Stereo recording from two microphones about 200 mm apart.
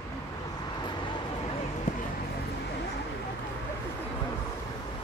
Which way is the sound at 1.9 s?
40° left (ahead or behind).